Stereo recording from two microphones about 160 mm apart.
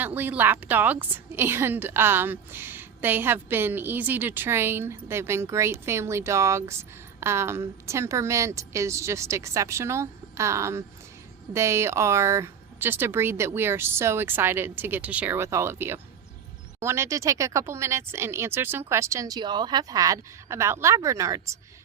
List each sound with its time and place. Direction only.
0.0 s a woman's voice: 10° right (ahead or behind)